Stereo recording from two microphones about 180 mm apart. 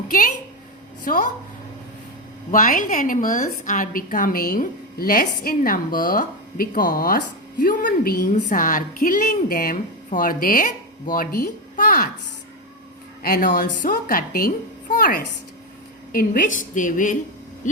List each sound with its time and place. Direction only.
1.0 s a woman's voice: 50° left (ahead or behind)
2.5 s a woman's voice: 50° left (ahead or behind)
13.2 s a woman's voice: 50° left (ahead or behind)